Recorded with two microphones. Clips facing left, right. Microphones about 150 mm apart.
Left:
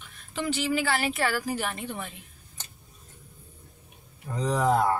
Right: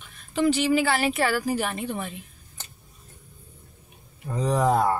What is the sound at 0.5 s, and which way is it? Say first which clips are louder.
Speech: right 5 dB; 20° right (ahead or behind).